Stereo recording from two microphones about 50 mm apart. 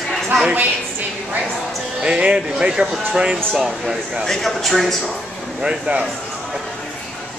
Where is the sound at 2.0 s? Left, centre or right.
Right.